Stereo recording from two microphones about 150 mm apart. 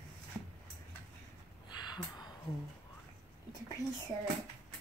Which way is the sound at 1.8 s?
30° left (ahead or behind).